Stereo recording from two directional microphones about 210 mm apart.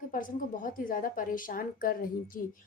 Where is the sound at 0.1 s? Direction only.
40° left (ahead or behind).